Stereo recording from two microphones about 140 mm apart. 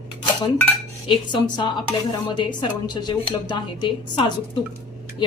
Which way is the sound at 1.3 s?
30° left (ahead or behind).